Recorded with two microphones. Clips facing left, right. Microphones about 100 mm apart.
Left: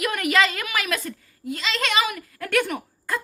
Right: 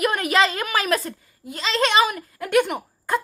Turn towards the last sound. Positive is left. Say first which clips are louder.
# right 4 dB
turn(degrees=-25)  # may be behind; listen again after turning